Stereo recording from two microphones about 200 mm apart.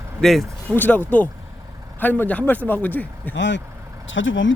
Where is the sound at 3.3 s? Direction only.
65° left (ahead or behind).